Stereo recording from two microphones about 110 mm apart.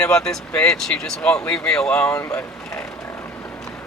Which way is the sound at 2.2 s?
25° left (ahead or behind).